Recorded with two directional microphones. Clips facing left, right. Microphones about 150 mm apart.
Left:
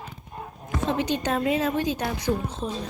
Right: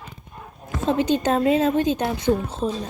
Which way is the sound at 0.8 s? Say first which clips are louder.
Right 6 dB; 30° right (ahead or behind).